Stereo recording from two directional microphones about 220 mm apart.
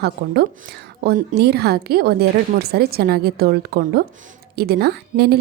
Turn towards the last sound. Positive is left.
turn(degrees=-45)  # may be behind; listen again after turning